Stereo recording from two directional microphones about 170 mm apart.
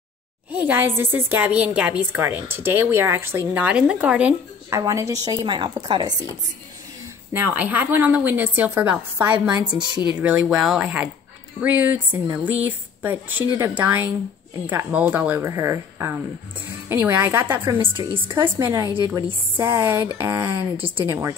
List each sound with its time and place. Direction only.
0.5 s a woman's voice: 10° right (ahead or behind)
4.6 s a woman's voice: 15° right (ahead or behind)
7.3 s a woman's voice: 10° right (ahead or behind)
17.7 s a woman's voice: 30° right (ahead or behind)
18.4 s a woman's voice: 20° right (ahead or behind)